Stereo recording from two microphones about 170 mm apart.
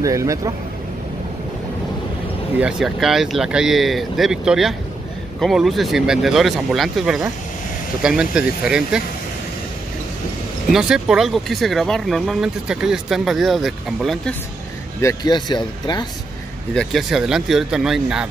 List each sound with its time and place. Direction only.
0.0 s speech: 20° right (ahead or behind)
2.6 s speech: centre (ahead or behind)
10.7 s speech: 5° right (ahead or behind)
15.0 s speech: 20° left (ahead or behind)
16.7 s speech: centre (ahead or behind)